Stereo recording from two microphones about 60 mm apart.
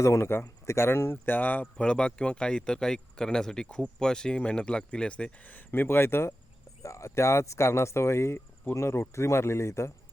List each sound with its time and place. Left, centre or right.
0.0 s speech: left
0.6 s speech: left
6.8 s speech: left